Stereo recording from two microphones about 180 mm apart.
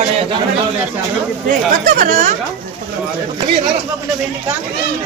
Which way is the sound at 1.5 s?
45° right (ahead or behind).